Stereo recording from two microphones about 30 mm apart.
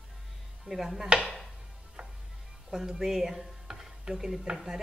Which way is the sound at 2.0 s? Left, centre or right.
Right.